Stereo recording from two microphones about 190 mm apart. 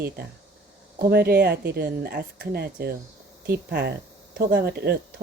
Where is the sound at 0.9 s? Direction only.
55° right (ahead or behind).